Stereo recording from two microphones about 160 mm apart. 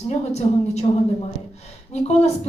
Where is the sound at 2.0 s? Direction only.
45° left (ahead or behind).